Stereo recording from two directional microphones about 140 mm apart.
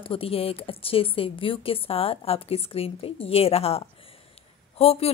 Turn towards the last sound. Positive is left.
turn(degrees=45)  # may be behind; listen again after turning